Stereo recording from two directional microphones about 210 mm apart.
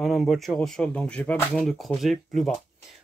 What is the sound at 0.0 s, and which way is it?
Speech, centre (ahead or behind).